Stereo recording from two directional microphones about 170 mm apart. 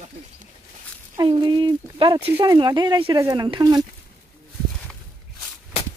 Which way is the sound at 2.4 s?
25° right (ahead or behind).